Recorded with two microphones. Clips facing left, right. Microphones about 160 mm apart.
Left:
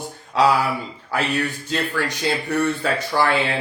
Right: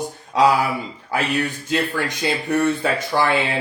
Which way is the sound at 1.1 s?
15° right (ahead or behind).